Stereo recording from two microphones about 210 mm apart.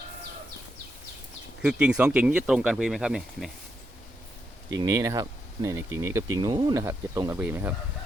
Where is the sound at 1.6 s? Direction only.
5° right (ahead or behind).